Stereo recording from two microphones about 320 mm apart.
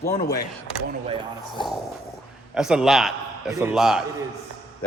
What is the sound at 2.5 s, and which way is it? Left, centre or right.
A man's voice, centre.